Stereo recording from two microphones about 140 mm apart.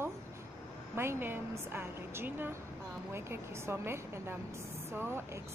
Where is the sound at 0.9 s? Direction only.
15° right (ahead or behind).